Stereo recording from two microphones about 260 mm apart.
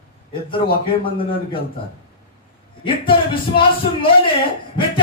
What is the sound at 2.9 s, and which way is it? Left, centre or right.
Speech, centre.